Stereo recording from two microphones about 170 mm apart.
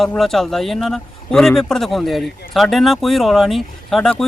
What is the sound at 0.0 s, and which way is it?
Speech, centre (ahead or behind).